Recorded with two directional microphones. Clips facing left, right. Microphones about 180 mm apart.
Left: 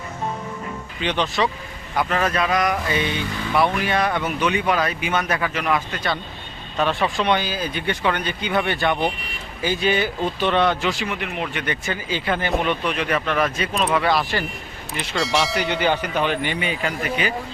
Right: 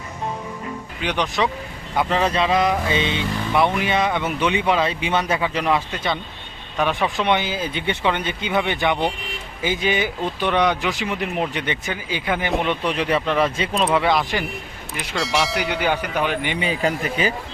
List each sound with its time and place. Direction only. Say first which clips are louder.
1.0 s speech: even; 15° right (ahead or behind)
6.7 s speech: even; 10° right (ahead or behind)
11.1 s speech: right 3 dB; 35° right (ahead or behind)
11.9 s speech: even; 15° right (ahead or behind)
12.8 s speech: right 2 dB; 30° right (ahead or behind)
15.1 s speech: even; centre (ahead or behind)
16.6 s speech: right 3 dB; 35° right (ahead or behind)